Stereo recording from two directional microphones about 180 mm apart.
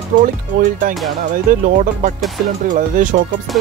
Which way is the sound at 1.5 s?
45° right (ahead or behind).